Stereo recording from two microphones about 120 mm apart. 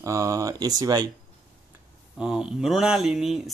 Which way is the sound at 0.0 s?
25° right (ahead or behind).